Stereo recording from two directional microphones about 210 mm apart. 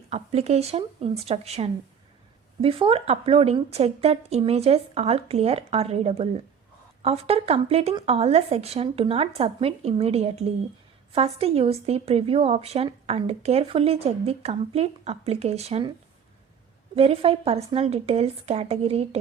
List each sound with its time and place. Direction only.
0.1 s a woman's voice: 30° right (ahead or behind)
16.9 s a woman's voice: 25° right (ahead or behind)